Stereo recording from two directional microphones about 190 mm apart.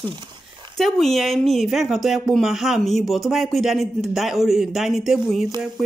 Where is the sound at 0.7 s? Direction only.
Centre (ahead or behind).